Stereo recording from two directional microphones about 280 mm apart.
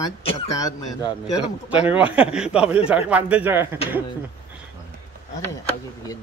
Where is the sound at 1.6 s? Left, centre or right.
Centre.